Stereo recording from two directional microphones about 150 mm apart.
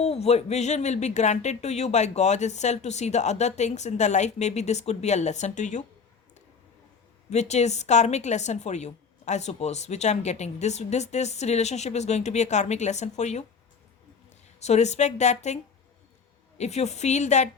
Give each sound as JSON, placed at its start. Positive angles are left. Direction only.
{"t": 0.0, "sound": "a woman's voice", "side_deg": 45}
{"t": 7.3, "sound": "a woman's voice", "side_deg": 50}
{"t": 14.6, "sound": "a woman's voice", "side_deg": 50}
{"t": 16.6, "sound": "a woman's voice", "side_deg": 45}